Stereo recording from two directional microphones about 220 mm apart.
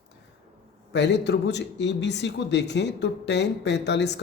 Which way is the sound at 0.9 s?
50° left (ahead or behind).